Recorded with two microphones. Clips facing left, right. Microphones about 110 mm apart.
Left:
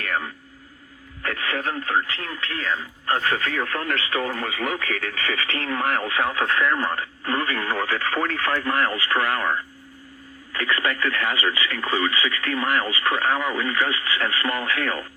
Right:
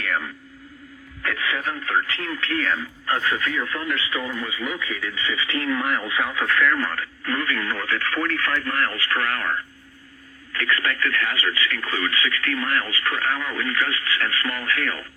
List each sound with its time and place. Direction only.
1.2 s speech: 40° left (ahead or behind)
3.2 s speech: 40° left (ahead or behind)
5.5 s speech: 35° left (ahead or behind)
6.4 s speech: 25° left (ahead or behind)